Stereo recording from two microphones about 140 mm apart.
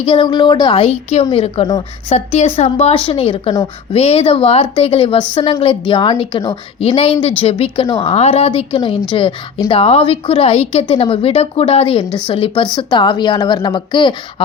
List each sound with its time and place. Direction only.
0.0 s a woman's voice: 40° left (ahead or behind)